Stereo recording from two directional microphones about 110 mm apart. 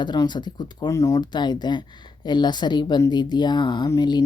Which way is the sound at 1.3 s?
40° left (ahead or behind).